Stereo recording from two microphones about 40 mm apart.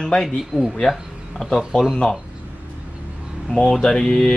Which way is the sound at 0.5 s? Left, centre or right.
Centre.